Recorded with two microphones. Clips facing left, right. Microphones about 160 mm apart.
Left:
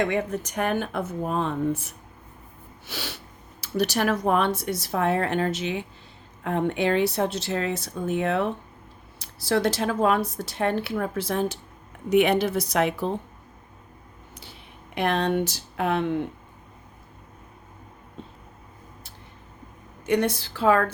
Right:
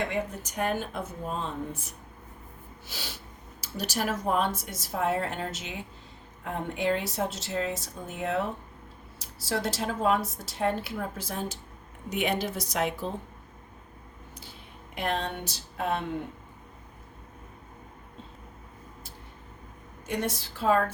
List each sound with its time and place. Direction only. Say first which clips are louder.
0.0 s speech: left 6 dB; 80° left
14.9 s speech: left 8 dB; 75° left (ahead or behind)
20.1 s speech: left 8 dB; 70° left (ahead or behind)